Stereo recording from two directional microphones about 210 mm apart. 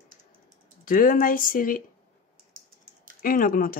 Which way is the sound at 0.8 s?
40° left (ahead or behind).